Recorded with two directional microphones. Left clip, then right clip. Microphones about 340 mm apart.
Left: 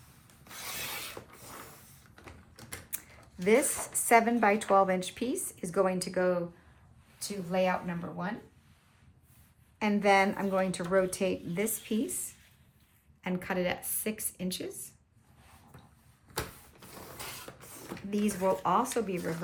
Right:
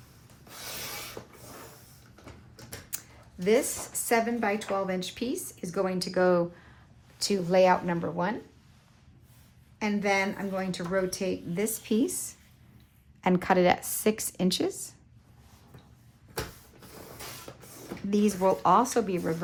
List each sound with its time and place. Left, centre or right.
1.2 s mechanisms: centre
2.9 s a sound: centre
4.1 s speech: centre
7.2 s speech: right
9.7 s speech: centre
13.2 s a woman's voice: centre
17.5 s a sound: centre
17.8 s speech: centre